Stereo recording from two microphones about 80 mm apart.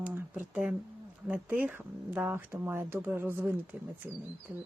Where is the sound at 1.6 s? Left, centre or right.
Right.